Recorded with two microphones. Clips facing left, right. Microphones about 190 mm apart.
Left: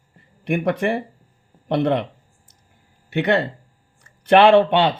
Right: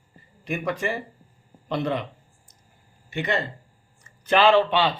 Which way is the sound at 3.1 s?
65° left (ahead or behind).